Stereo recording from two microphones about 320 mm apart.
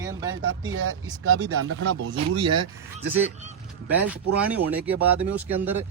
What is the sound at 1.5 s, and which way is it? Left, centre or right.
Speech, right.